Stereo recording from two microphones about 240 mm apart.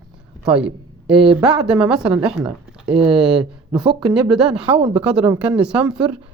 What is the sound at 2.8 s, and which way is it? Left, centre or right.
Speech, right.